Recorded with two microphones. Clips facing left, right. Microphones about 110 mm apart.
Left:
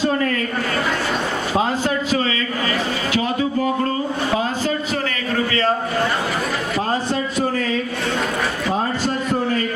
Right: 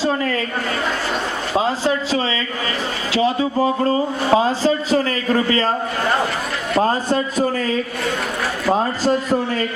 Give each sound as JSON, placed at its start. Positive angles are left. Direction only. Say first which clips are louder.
{"t": 1.8, "sound": "a man's voice", "louder": "right 1 dB", "side_deg": -35}
{"t": 7.1, "sound": "a man's voice", "louder": "right 2 dB", "side_deg": -40}